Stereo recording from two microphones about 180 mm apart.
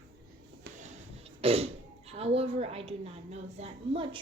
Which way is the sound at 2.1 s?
35° right (ahead or behind).